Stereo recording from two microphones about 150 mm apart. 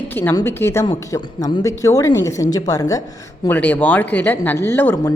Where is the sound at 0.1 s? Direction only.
15° left (ahead or behind).